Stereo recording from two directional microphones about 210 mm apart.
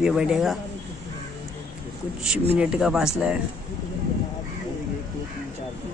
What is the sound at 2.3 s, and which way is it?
Speech, 5° right (ahead or behind).